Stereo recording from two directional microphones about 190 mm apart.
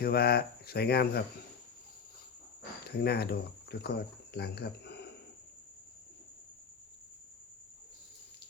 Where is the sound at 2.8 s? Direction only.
55° left (ahead or behind).